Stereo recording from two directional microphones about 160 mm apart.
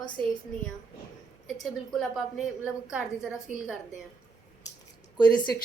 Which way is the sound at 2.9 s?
5° right (ahead or behind).